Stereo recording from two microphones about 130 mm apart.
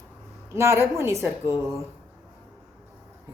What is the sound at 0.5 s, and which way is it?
A woman's voice, 20° right (ahead or behind).